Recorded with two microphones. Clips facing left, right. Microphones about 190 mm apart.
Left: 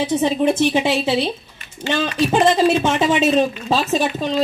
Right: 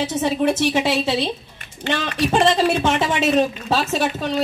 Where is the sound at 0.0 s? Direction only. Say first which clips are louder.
Left 2 dB; 15° left (ahead or behind).